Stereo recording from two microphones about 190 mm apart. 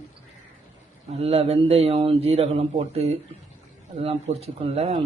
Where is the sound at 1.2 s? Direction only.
30° right (ahead or behind).